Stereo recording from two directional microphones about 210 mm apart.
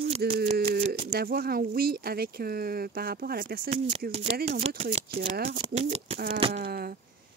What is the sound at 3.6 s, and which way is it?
Speech, 30° right (ahead or behind).